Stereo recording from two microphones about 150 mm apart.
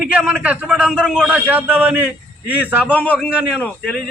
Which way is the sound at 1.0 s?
5° left (ahead or behind).